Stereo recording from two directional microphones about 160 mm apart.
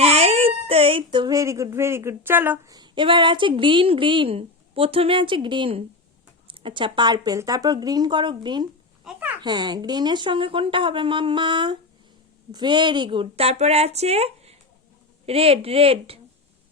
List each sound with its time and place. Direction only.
0.0 s speech: 40° right (ahead or behind); by 2.7 s 15° right (ahead or behind)
2.7 s a woman's voice: 30° right (ahead or behind)
9.0 s a sound: 10° right (ahead or behind)
9.4 s a woman's voice: 25° right (ahead or behind)